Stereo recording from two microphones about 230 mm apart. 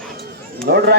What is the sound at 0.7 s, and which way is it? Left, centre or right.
Speech, right.